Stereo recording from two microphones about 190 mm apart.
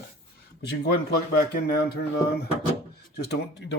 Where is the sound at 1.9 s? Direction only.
55° left (ahead or behind).